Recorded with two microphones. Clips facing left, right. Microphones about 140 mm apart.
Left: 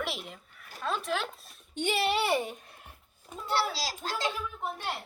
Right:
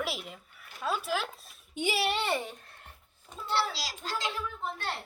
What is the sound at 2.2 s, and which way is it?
Speech, 15° left (ahead or behind).